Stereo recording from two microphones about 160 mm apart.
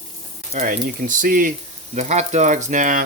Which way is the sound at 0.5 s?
55° right (ahead or behind).